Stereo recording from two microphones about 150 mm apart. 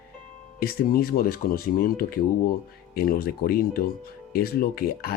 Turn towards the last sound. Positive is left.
turn(degrees=80)